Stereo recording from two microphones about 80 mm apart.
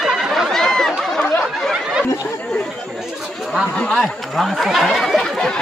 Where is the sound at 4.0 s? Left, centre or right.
Centre.